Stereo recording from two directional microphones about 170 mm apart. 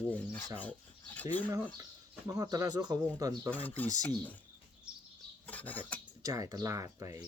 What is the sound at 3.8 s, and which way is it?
Speech, 20° right (ahead or behind).